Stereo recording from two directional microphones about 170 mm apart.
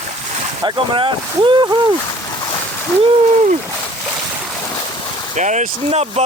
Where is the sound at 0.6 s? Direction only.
30° right (ahead or behind).